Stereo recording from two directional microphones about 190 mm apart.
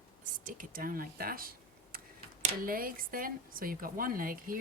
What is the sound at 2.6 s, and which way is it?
A woman's voice, 50° right (ahead or behind).